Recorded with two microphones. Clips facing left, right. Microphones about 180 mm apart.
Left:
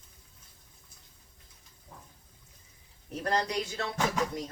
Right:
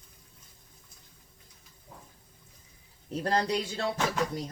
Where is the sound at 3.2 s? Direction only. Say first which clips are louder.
Right 2 dB; 30° right (ahead or behind).